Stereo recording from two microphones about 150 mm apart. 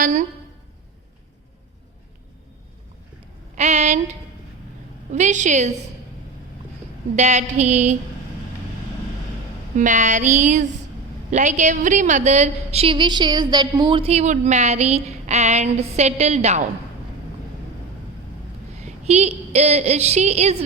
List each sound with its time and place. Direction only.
0.0 s speech: 60° right (ahead or behind)
3.5 s a woman's voice: 50° right (ahead or behind)
7.2 s a woman's voice: 50° right (ahead or behind)
9.7 s a woman's voice: 55° right (ahead or behind)
18.8 s a woman's voice: 45° right (ahead or behind)